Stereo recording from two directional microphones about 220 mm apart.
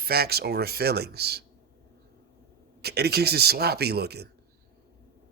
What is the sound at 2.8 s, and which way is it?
Speech, 45° right (ahead or behind).